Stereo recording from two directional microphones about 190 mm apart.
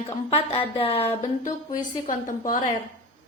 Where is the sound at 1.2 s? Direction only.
40° left (ahead or behind).